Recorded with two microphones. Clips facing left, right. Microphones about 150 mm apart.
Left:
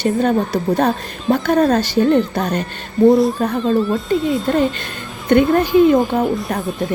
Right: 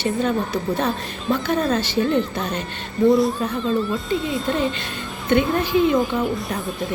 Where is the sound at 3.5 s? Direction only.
30° left (ahead or behind).